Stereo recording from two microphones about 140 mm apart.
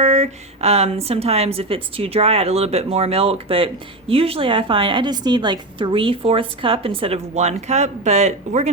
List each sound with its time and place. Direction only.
0.0 s a woman's voice: 55° right (ahead or behind)